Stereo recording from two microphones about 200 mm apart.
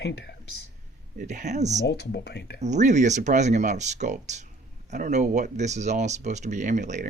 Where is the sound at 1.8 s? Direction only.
55° left (ahead or behind).